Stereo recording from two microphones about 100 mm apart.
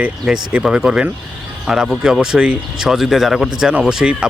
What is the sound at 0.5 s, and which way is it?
Speech, 5° right (ahead or behind).